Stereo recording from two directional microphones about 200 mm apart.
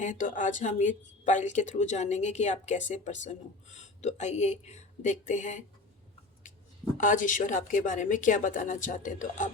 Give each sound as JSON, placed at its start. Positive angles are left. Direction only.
{"t": 0.0, "sound": "speech", "side_deg": 40}
{"t": 6.9, "sound": "speech", "side_deg": 40}